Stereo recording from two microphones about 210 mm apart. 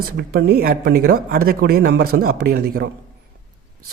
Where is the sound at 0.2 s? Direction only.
50° right (ahead or behind).